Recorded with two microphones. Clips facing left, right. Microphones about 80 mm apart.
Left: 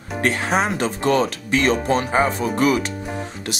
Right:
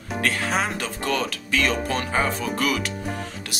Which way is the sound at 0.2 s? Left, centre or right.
Left.